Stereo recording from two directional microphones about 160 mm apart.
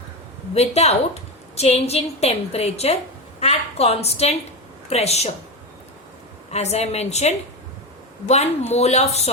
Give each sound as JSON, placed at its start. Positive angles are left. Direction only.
{"t": 0.5, "sound": "a woman's voice", "side_deg": 40}
{"t": 6.5, "sound": "speech", "side_deg": 40}